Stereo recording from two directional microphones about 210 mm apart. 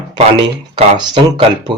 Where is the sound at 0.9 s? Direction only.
20° right (ahead or behind).